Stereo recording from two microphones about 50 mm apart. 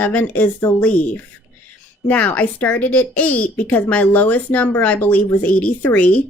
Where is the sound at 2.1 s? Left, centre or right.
Left.